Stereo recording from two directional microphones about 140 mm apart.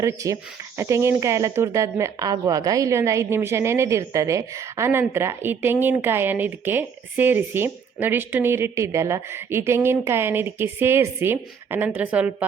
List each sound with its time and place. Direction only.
0.0 s speech: 20° right (ahead or behind)